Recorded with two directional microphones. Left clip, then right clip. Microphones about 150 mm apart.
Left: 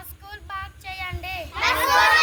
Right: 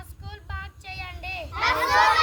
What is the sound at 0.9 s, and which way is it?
Child singing, 60° right (ahead or behind).